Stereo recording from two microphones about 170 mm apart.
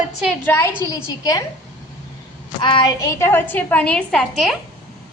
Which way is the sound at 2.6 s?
30° left (ahead or behind).